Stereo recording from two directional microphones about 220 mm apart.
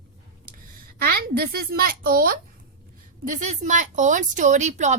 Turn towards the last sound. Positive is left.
turn(degrees=-30)  # may be behind; listen again after turning